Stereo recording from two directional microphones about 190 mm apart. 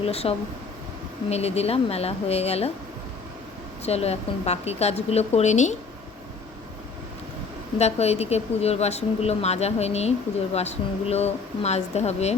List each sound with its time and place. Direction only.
0.0 s speech: 30° left (ahead or behind)
3.8 s speech: 35° left (ahead or behind)
7.8 s speech: 35° left (ahead or behind)